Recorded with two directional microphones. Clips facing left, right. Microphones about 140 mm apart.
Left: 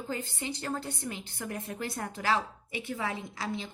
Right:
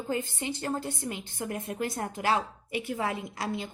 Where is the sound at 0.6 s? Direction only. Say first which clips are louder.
Right 3 dB; 25° right (ahead or behind).